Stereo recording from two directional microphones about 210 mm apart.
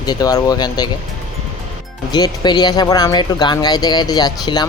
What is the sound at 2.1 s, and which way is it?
Speech, 20° left (ahead or behind).